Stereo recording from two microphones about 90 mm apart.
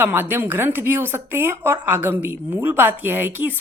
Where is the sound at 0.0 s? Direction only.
25° right (ahead or behind).